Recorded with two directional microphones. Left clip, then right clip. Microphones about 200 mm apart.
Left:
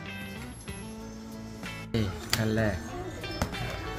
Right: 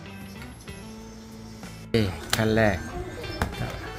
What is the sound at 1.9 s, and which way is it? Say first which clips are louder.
Speech: right 6 dB; 35° right (ahead or behind).